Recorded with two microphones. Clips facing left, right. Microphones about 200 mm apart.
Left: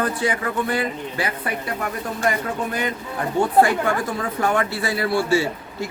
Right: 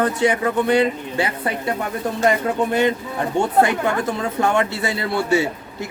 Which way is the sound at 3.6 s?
20° right (ahead or behind).